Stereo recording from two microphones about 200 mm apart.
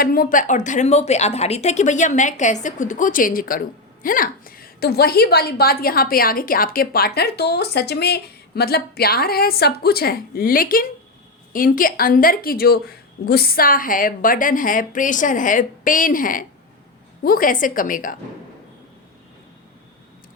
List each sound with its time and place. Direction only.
0.0 s a woman's voice: 45° left (ahead or behind)